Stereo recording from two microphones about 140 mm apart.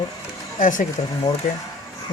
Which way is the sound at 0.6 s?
65° left (ahead or behind).